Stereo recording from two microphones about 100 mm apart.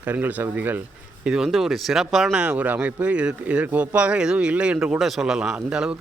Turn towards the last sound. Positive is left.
turn(degrees=-10)  # may be behind; listen again after turning